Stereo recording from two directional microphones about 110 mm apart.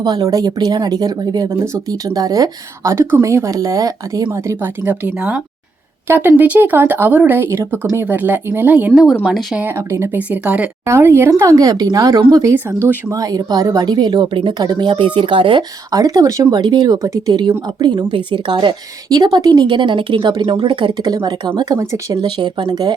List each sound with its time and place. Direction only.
0.0 s a woman's voice: 40° right (ahead or behind); by 8.9 s 15° right (ahead or behind)
9.2 s speech: centre (ahead or behind)
9.6 s speech: 20° right (ahead or behind)
10.2 s speech: 10° right (ahead or behind)
10.8 s speech: 25° right (ahead or behind)
12.5 s speech: 15° right (ahead or behind)
13.1 s a woman's voice: 30° right (ahead or behind); by 15.6 s 50° right (ahead or behind)
15.9 s a woman's voice: 35° right (ahead or behind)
22.2 s a woman's voice: 45° right (ahead or behind)